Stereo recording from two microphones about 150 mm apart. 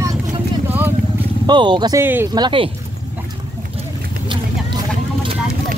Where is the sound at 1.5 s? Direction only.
30° right (ahead or behind).